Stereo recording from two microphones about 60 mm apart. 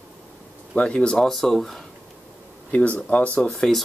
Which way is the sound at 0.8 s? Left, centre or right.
Centre.